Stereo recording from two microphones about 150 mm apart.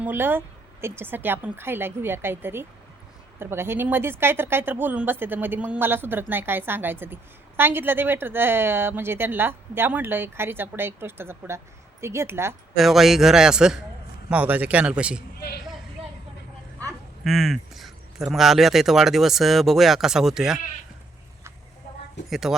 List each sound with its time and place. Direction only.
0.0 s speech: 15° right (ahead or behind)
12.7 s speech: centre (ahead or behind)
15.4 s speech: 90° left
17.2 s speech: centre (ahead or behind)
22.3 s speech: centre (ahead or behind)